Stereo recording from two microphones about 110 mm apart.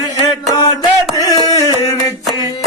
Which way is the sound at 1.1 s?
35° left (ahead or behind).